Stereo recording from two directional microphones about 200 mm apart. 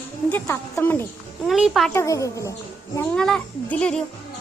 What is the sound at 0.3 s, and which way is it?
Speech, 10° left (ahead or behind).